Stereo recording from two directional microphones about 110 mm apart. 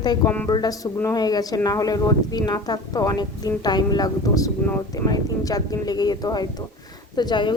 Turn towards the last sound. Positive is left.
turn(degrees=40)  # may be behind; listen again after turning